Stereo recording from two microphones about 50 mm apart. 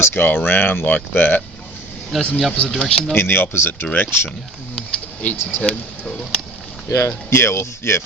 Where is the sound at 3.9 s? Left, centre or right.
Left.